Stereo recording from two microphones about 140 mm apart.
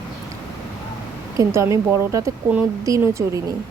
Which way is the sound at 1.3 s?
20° right (ahead or behind).